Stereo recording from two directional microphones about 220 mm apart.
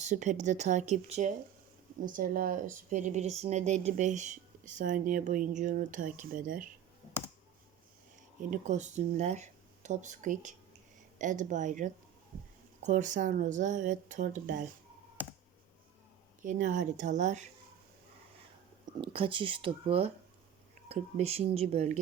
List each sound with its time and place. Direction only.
0.0 s speech: 35° right (ahead or behind)
8.4 s speech: 35° right (ahead or behind)
16.4 s speech: 35° right (ahead or behind)
19.0 s speech: 25° right (ahead or behind)